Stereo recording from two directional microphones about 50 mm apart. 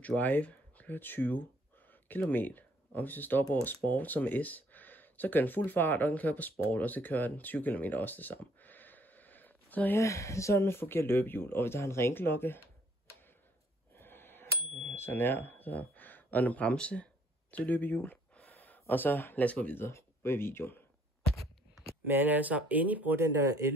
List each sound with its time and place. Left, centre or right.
0.0 s speech: left
9.9 s speech: left
10.7 s speech: left
13.9 s a sound: left
15.0 s speech: left
15.7 s speech: left
18.3 s a sound: left
19.4 s speech: left
19.9 s speech: left
22.0 s speech: right